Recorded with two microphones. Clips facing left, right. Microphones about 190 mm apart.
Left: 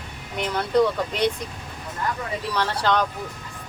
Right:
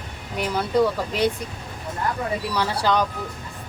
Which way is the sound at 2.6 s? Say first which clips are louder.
Even; 10° right (ahead or behind).